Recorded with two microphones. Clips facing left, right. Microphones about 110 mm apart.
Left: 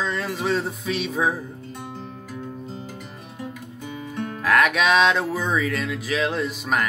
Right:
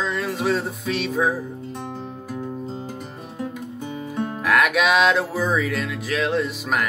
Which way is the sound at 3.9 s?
35° right (ahead or behind).